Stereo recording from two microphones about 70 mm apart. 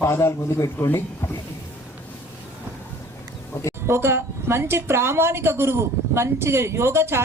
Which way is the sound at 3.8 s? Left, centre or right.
Right.